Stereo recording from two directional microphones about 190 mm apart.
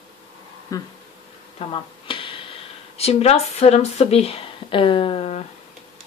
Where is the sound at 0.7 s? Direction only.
15° left (ahead or behind).